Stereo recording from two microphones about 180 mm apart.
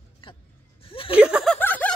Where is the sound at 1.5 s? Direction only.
10° left (ahead or behind).